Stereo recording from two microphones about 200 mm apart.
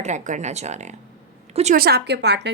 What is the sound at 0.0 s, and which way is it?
Speech, 35° right (ahead or behind).